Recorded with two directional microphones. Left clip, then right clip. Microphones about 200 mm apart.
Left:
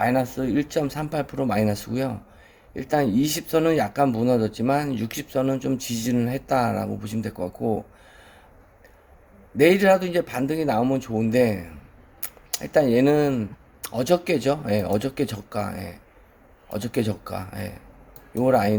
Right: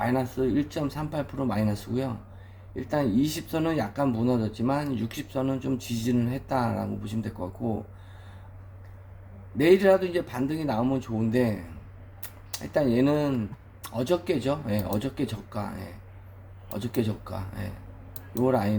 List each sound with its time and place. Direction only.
0.0 s speech: 55° left (ahead or behind)
9.6 s speech: 55° left (ahead or behind)